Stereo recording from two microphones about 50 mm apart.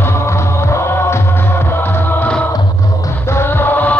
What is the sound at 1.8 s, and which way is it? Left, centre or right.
Music, left.